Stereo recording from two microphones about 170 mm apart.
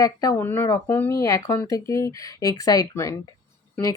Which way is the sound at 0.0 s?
20° left (ahead or behind).